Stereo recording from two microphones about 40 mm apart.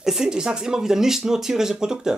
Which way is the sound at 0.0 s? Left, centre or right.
Centre.